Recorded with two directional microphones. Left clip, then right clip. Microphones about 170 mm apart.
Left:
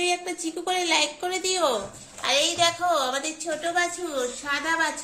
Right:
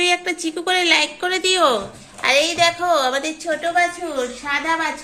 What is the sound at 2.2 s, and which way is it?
A woman's voice, 25° right (ahead or behind).